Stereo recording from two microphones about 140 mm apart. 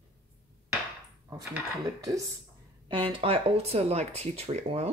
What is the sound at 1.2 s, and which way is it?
Speech, 25° right (ahead or behind).